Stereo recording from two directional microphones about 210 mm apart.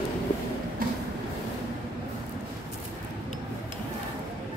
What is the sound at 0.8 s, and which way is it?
Vehicle, 40° right (ahead or behind).